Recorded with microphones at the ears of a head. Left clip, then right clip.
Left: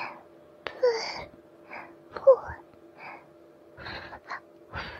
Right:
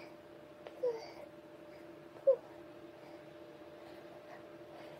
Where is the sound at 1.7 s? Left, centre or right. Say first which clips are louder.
Left 11 dB; left.